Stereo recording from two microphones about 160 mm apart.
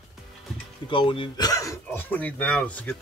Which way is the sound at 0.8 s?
30° left (ahead or behind).